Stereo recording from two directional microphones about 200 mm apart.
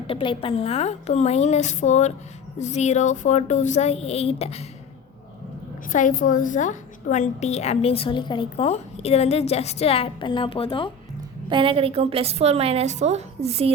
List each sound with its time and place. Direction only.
0.1 s a woman's voice: 25° left (ahead or behind)
5.9 s a woman's voice: 40° left (ahead or behind)
11.4 s a woman's voice: 25° right (ahead or behind)